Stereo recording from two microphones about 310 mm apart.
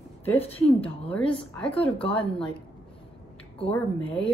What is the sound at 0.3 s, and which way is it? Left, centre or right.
A woman's voice, centre.